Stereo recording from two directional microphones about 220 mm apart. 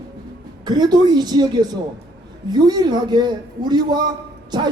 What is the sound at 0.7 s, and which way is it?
Speech, 20° right (ahead or behind).